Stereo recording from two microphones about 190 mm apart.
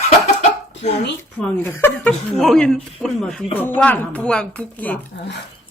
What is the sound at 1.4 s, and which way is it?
A woman's voice, 10° left (ahead or behind).